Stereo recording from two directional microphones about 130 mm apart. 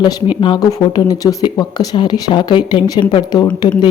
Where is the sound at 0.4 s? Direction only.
30° left (ahead or behind).